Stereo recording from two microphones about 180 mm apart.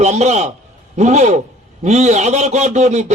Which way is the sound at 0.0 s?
40° right (ahead or behind).